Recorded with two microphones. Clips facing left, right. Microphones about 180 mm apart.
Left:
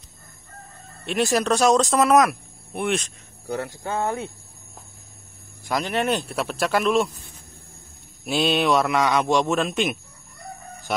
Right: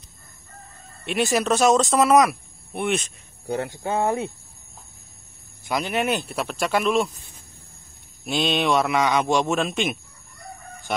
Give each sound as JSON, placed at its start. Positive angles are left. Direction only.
{"t": 1.0, "sound": "speech", "side_deg": 0}
{"t": 3.4, "sound": "speech", "side_deg": -20}
{"t": 5.7, "sound": "speech", "side_deg": -5}
{"t": 8.3, "sound": "speech", "side_deg": 5}